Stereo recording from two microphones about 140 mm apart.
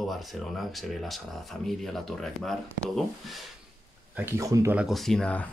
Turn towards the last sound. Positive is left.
turn(degrees=5)  # may be behind; listen again after turning